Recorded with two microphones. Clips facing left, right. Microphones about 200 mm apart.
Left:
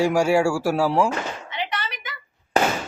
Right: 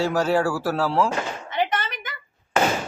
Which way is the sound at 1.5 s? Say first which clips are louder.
Right 8 dB; 50° right (ahead or behind).